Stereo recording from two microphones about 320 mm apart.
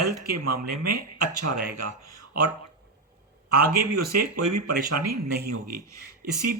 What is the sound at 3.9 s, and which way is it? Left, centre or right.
Speech, right.